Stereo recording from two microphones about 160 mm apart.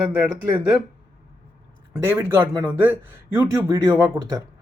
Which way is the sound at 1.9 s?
15° right (ahead or behind).